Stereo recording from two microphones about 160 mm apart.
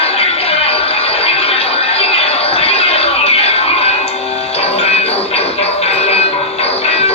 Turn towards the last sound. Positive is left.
turn(degrees=40)  # may be behind; listen again after turning